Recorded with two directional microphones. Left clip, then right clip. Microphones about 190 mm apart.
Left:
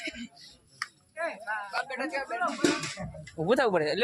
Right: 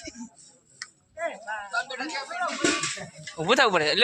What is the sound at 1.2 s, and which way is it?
Jingle bell, 40° right (ahead or behind).